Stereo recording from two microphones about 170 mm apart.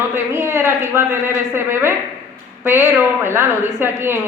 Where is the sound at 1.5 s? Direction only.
15° right (ahead or behind).